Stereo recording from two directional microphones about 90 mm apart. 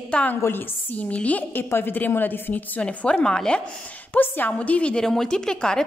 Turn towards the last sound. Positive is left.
turn(degrees=10)  # may be behind; listen again after turning